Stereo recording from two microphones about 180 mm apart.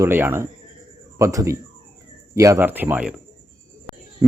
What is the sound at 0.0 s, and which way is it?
Speech, 10° right (ahead or behind).